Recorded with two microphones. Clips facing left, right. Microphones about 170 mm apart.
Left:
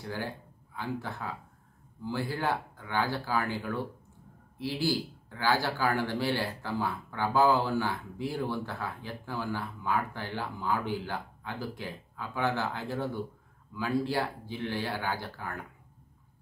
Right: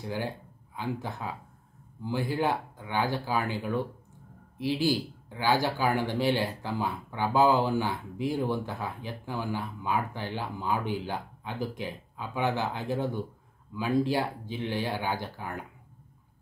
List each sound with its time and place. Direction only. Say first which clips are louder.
0.0 s speech: right 3 dB; 15° right (ahead or behind)